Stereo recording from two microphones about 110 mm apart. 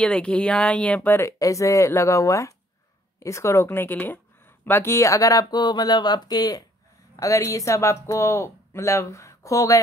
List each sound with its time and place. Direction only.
0.0 s a woman's voice: 10° left (ahead or behind); by 9.8 s 30° left (ahead or behind)